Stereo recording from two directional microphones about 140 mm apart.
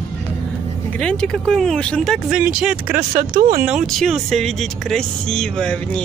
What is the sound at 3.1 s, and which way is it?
Speech, 75° right (ahead or behind).